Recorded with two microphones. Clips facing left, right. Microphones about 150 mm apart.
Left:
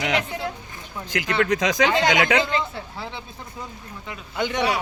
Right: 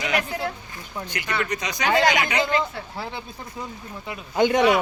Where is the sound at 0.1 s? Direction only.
20° left (ahead or behind).